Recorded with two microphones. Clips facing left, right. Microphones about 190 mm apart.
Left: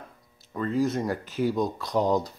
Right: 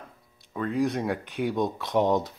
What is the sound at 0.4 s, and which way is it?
Speech, centre (ahead or behind).